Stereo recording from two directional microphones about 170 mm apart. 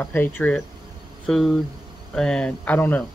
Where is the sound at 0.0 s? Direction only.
10° left (ahead or behind).